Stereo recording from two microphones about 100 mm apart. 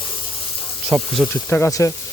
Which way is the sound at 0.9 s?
20° right (ahead or behind).